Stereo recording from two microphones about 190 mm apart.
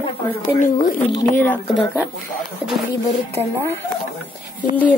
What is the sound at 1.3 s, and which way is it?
Speech, 10° left (ahead or behind).